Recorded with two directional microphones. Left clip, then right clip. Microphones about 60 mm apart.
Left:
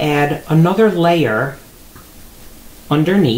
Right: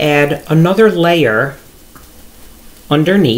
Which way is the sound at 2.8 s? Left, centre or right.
Right.